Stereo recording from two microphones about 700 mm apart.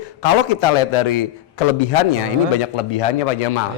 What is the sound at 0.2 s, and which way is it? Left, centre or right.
A man's voice, left.